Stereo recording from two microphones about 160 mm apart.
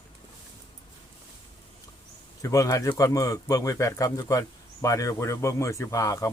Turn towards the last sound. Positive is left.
turn(degrees=20)  # may be behind; listen again after turning